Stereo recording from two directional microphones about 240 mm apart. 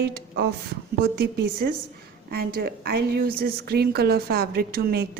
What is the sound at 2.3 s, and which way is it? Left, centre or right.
A woman's voice, right.